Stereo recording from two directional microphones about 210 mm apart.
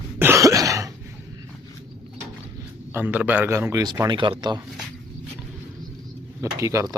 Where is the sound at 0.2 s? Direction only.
10° right (ahead or behind).